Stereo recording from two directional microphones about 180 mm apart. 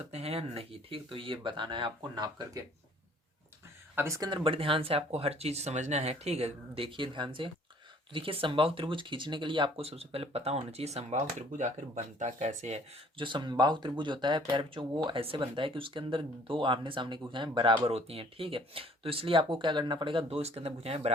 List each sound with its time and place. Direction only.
0.0 s speech: 35° right (ahead or behind)
3.9 s speech: 15° right (ahead or behind); by 21.1 s 35° right (ahead or behind)